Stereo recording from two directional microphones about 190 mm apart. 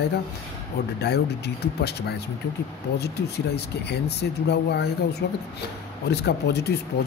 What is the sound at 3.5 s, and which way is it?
Speech, 60° left (ahead or behind).